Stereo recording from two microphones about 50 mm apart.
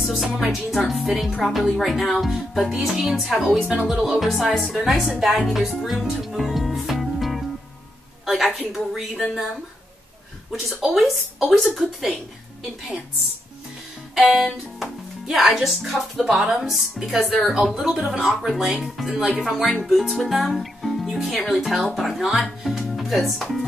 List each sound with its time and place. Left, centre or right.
0.0 s speech: centre
5.5 s music: centre
8.5 s a woman's voice: centre
9.1 s speech: centre
10.9 s speech: centre
14.1 s music: centre
15.2 s a woman's voice: centre